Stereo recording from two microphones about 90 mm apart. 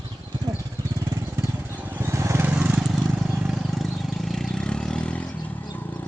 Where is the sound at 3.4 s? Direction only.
Centre (ahead or behind).